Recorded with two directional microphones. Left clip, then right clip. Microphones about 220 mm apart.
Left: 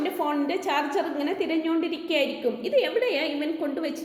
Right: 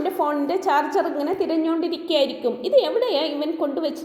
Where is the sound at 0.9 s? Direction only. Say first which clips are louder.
Right 5 dB; 20° right (ahead or behind).